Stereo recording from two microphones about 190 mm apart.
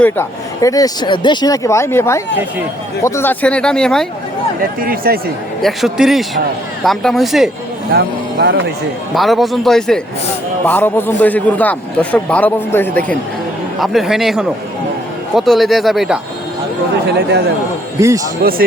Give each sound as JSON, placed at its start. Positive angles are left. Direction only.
{"t": 0.0, "sound": "a man's voice", "side_deg": 15}
{"t": 4.8, "sound": "speech", "side_deg": -50}
{"t": 5.6, "sound": "speech", "side_deg": 0}
{"t": 7.9, "sound": "speech", "side_deg": -60}
{"t": 9.1, "sound": "a man's voice", "side_deg": 0}
{"t": 13.7, "sound": "speech", "side_deg": 0}
{"t": 18.0, "sound": "a man's voice", "side_deg": -15}
{"t": 18.4, "sound": "speech", "side_deg": -55}